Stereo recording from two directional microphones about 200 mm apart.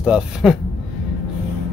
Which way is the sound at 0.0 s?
5° right (ahead or behind).